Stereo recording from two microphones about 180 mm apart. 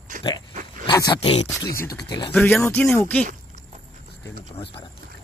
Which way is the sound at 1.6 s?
60° left (ahead or behind).